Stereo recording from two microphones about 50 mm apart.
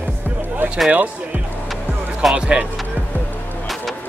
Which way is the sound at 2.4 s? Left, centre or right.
Centre.